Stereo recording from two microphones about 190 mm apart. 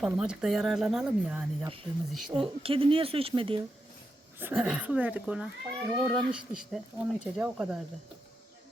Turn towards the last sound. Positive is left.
turn(degrees=-5)  # may be behind; listen again after turning